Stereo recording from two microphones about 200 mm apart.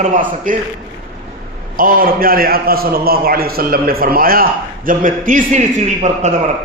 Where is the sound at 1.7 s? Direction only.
45° right (ahead or behind).